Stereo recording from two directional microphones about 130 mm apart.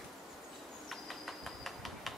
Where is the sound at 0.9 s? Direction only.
Centre (ahead or behind).